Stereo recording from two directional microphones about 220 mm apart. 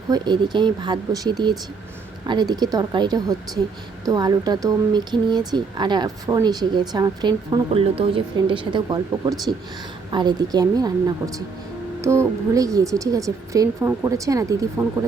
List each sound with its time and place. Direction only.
0.1 s a woman's voice: 20° right (ahead or behind)